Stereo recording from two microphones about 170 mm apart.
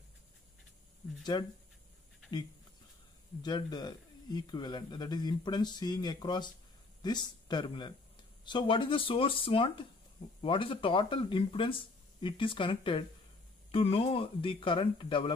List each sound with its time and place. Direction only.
1.3 s speech: 25° left (ahead or behind)
3.4 s speech: 25° left (ahead or behind)